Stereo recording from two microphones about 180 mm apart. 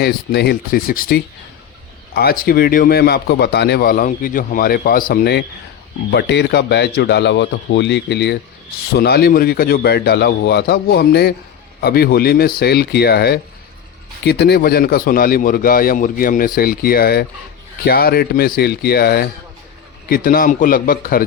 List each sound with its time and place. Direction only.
0.0 s a man's voice: 60° left (ahead or behind)